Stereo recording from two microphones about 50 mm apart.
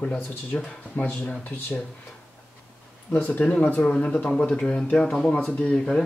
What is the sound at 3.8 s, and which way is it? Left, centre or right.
Speech, left.